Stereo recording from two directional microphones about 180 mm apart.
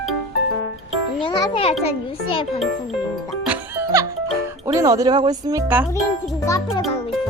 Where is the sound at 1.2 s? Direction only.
30° left (ahead or behind).